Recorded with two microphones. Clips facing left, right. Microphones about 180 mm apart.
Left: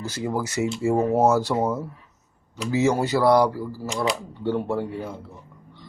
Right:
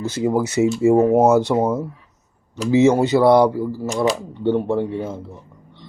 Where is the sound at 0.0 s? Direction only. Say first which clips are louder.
Right 7 dB; 25° right (ahead or behind).